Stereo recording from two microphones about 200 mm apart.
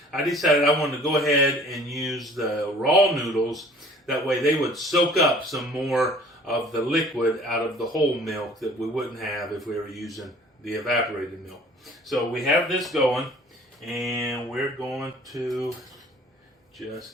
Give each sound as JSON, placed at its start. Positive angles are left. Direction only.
{"t": 0.1, "sound": "speech", "side_deg": 0}
{"t": 16.7, "sound": "speech", "side_deg": 0}